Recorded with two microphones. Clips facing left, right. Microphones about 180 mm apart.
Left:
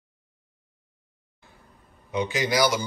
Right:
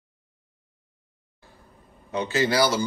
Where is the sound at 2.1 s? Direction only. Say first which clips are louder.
Right 2 dB; 15° left (ahead or behind).